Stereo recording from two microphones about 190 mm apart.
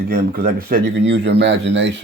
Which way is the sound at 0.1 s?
50° right (ahead or behind).